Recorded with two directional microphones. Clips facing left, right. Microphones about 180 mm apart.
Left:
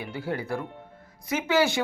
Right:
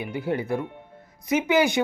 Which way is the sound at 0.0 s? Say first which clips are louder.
Right 4 dB; 20° right (ahead or behind).